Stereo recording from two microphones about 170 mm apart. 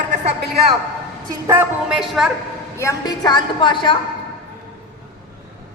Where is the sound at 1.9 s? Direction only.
Centre (ahead or behind).